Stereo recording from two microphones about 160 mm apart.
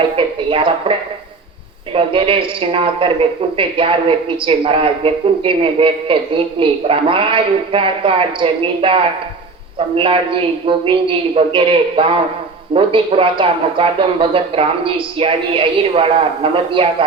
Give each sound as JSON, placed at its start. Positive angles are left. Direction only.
{"t": 0.0, "sound": "a woman's voice", "side_deg": -35}